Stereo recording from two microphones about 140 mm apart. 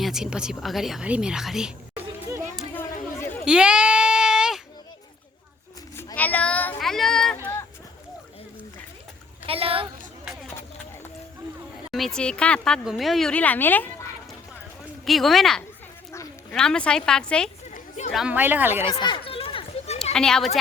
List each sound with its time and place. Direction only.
0.0 s speech: 5° right (ahead or behind)
2.7 s chatter: 15° left (ahead or behind)
3.4 s goat: 5° right (ahead or behind)
6.1 s child singing: 10° left (ahead or behind)
9.5 s a woman's voice: 40° right (ahead or behind)
11.9 s speech: centre (ahead or behind)
15.0 s speech: centre (ahead or behind)
17.7 s a sound: 60° left (ahead or behind)
18.1 s speech: centre (ahead or behind)
18.3 s speech: 15° right (ahead or behind)
18.9 s a sound: 35° left (ahead or behind)
20.1 s speech: 5° left (ahead or behind)